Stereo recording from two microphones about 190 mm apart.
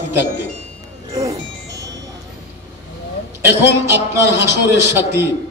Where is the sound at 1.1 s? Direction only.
20° right (ahead or behind).